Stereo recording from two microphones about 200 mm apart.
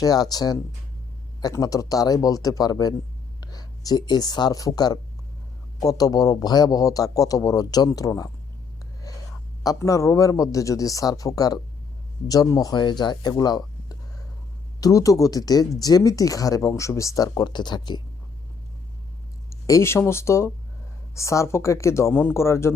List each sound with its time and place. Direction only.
0.0 s speech: 20° left (ahead or behind)
9.1 s whispering: 15° left (ahead or behind)
9.6 s speech: 15° left (ahead or behind)
19.6 s speech: 15° left (ahead or behind)